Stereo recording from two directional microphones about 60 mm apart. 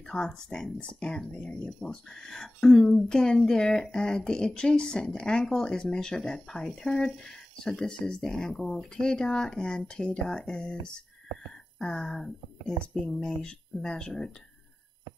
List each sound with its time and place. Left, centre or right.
0.3 s speech: centre
11.8 s speech: centre
13.4 s speech: centre